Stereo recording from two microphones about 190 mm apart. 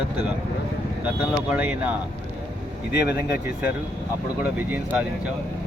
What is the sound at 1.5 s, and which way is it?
Speech, 10° right (ahead or behind).